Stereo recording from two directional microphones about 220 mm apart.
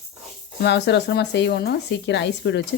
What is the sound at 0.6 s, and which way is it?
Speech, 50° left (ahead or behind).